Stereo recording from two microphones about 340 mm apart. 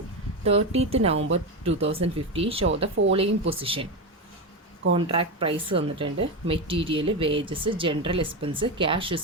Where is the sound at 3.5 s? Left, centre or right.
Centre.